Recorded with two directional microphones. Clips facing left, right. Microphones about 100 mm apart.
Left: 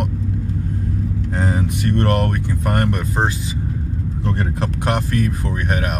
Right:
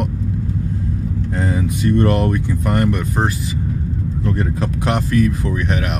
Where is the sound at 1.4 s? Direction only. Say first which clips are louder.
Right 2 dB; 60° left (ahead or behind).